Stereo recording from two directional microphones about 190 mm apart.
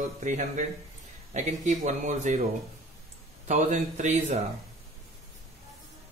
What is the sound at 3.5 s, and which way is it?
Speech, 40° right (ahead or behind).